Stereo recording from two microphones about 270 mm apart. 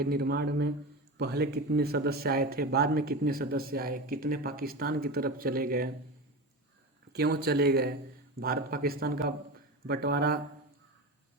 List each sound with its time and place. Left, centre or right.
0.0 s speech: right
7.1 s speech: right